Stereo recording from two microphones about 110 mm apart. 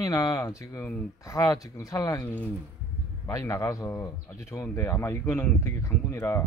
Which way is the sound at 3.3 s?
25° left (ahead or behind).